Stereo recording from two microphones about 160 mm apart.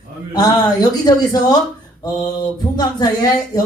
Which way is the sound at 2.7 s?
25° left (ahead or behind).